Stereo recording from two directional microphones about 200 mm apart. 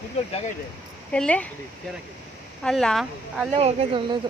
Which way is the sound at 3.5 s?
30° right (ahead or behind).